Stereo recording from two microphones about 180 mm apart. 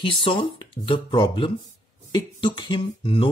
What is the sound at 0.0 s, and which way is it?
Speech, 30° left (ahead or behind).